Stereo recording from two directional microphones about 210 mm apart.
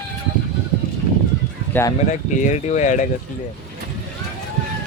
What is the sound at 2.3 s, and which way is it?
Speech, 35° left (ahead or behind).